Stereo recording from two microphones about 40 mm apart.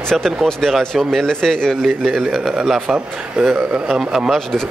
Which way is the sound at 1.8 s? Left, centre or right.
Centre.